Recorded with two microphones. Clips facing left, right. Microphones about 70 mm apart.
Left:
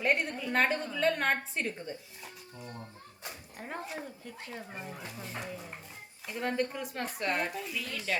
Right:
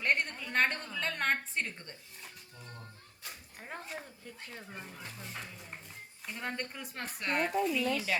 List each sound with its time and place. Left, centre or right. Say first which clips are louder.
0.0 s a woman's voice: left 2 dB; centre
4.7 s a woman's voice: left 4 dB; centre